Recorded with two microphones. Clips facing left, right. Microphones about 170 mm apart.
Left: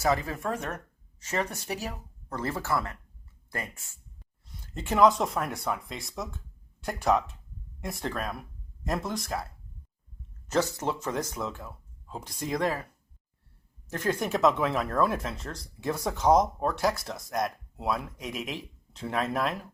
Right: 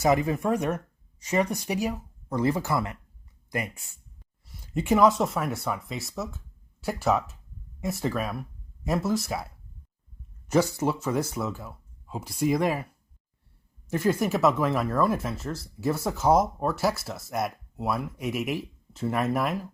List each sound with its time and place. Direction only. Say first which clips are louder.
0.0 s speech: right 4 dB; 15° right (ahead or behind)
10.5 s speech: right 4 dB; 10° right (ahead or behind)